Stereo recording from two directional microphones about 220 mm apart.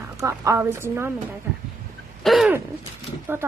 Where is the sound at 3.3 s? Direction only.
10° right (ahead or behind).